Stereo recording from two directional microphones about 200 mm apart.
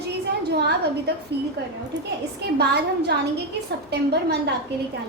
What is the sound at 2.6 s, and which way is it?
A woman's voice, 55° right (ahead or behind).